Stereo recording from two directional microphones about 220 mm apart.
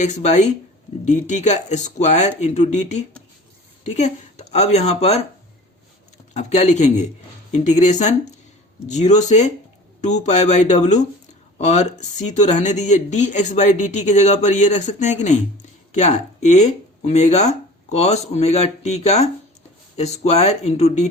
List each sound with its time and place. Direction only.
0.0 s speech: 30° left (ahead or behind)
6.3 s speech: 30° left (ahead or behind)